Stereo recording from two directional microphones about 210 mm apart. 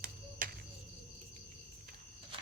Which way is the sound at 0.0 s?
40° right (ahead or behind).